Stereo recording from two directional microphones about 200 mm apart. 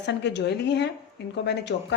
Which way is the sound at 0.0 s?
60° left (ahead or behind).